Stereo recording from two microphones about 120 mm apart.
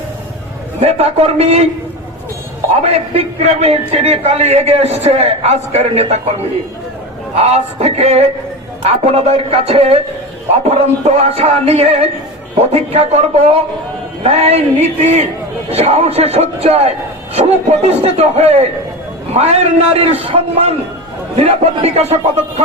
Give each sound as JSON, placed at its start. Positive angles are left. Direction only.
{"t": 0.8, "sound": "speech", "side_deg": -60}
{"t": 2.8, "sound": "a man's voice", "side_deg": -60}
{"t": 7.4, "sound": "a man's voice", "side_deg": -60}